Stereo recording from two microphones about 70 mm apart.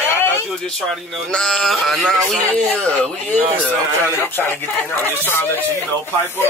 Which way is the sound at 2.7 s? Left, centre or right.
Centre.